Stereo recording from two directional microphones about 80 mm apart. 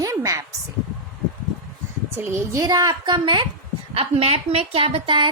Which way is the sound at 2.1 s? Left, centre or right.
Right.